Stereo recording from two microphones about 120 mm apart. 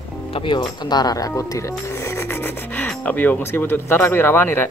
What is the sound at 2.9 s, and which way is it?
Speech, 10° left (ahead or behind).